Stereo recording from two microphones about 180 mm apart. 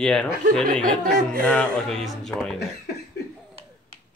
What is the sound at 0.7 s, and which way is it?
Speech, 25° right (ahead or behind).